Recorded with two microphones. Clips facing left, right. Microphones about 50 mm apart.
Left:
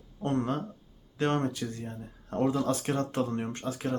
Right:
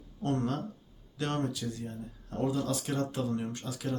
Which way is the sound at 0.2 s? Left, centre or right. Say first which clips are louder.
Left 2 dB; left.